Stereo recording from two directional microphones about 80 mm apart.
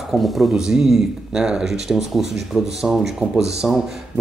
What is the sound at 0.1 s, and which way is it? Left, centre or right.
Speech, left.